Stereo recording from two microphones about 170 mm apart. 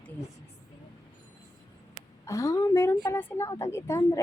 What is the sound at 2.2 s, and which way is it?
A woman's voice, 20° left (ahead or behind).